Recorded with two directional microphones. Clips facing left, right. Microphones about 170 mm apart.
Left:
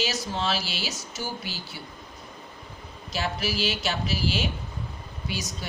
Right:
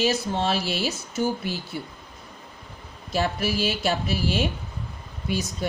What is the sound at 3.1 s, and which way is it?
Speech, 50° right (ahead or behind).